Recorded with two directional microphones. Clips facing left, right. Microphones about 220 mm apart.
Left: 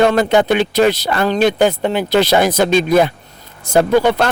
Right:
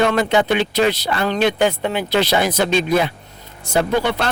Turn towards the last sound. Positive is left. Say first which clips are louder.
# left 6 dB
turn(degrees=45)  # may be behind; listen again after turning